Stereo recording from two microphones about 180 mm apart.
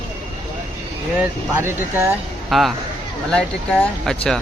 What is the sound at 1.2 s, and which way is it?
Speech, 10° right (ahead or behind).